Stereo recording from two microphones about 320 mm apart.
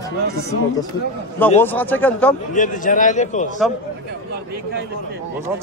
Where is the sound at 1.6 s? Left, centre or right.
Centre.